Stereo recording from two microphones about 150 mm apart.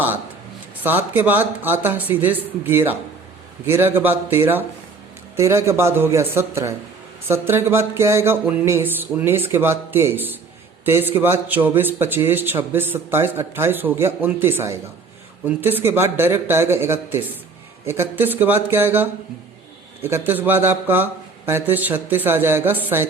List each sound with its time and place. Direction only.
0.8 s a man's voice: 10° right (ahead or behind)